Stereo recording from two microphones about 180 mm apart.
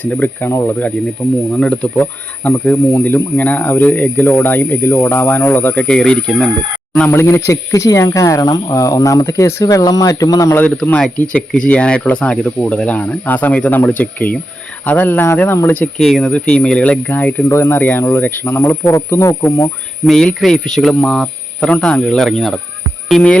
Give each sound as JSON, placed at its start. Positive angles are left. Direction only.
{"t": 0.0, "sound": "speech", "side_deg": 10}
{"t": 10.8, "sound": "speech", "side_deg": 5}
{"t": 20.1, "sound": "speech", "side_deg": 5}